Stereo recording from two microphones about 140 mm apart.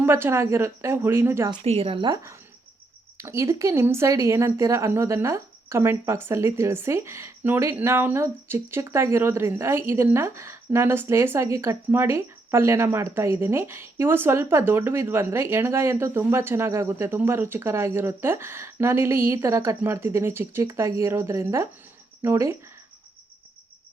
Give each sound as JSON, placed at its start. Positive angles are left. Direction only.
{"t": 0.0, "sound": "speech", "side_deg": -15}
{"t": 1.6, "sound": "speech", "side_deg": -45}
{"t": 2.0, "sound": "speech", "side_deg": -20}